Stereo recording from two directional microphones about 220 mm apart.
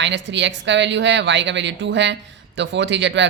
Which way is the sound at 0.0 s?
55° right (ahead or behind).